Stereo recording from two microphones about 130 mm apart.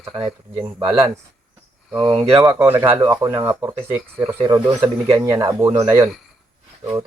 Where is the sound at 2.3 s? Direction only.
25° right (ahead or behind).